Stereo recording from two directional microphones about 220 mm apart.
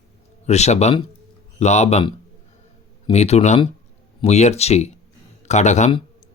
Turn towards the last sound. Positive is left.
turn(degrees=30)  # may be behind; listen again after turning